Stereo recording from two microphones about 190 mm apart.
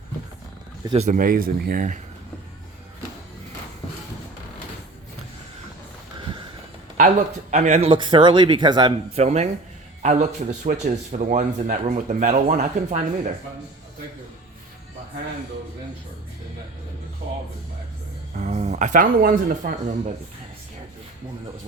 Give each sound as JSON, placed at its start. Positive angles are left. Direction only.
{"t": 0.9, "sound": "speech", "side_deg": -40}
{"t": 6.1, "sound": "a sound", "side_deg": -25}
{"t": 6.9, "sound": "speech", "side_deg": -40}
{"t": 9.2, "sound": "a man's voice", "side_deg": -35}
{"t": 18.3, "sound": "speech", "side_deg": -35}